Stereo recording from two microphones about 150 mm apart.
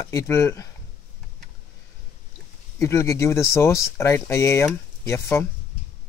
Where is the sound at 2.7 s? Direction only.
20° left (ahead or behind).